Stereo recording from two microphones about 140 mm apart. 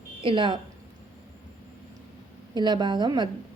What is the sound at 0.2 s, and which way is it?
Speech, 35° right (ahead or behind).